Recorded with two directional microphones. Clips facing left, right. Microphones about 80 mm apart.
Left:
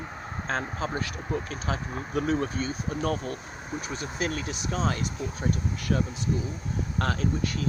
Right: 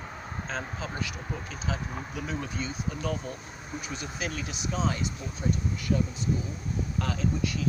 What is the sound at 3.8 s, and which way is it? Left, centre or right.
Speech, left.